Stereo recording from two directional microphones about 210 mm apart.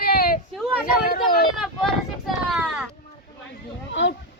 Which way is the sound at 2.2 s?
Centre (ahead or behind).